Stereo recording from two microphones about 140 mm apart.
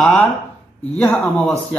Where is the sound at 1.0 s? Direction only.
10° left (ahead or behind).